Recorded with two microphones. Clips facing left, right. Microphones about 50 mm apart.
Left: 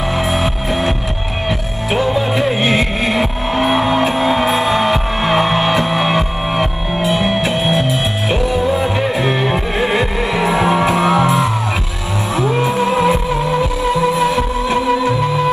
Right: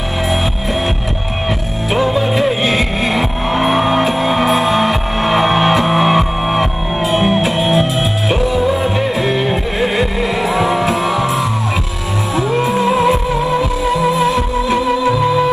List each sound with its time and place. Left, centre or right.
2.3 s music: centre
3.5 s music: centre
5.4 s music: right
6.0 s music: centre
8.3 s music: centre
9.5 s music: centre
10.6 s music: left
11.0 s music: left
12.4 s music: centre